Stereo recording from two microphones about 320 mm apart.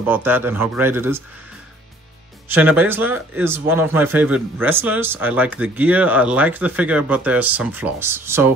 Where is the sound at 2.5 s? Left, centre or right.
Centre.